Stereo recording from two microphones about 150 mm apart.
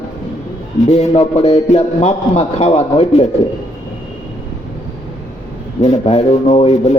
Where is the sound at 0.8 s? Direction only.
45° left (ahead or behind).